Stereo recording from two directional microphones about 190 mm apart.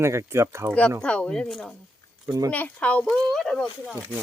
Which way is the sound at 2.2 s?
15° right (ahead or behind).